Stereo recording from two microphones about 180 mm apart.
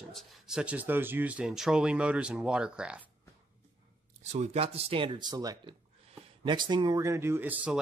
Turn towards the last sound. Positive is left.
turn(degrees=-10)  # may be behind; listen again after turning